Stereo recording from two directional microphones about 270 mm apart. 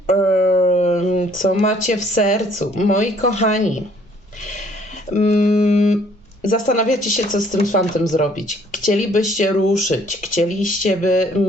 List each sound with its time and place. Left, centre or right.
0.1 s speech: left
5.1 s speech: left